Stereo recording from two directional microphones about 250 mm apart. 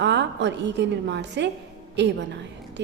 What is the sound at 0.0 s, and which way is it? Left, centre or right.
A woman's voice, right.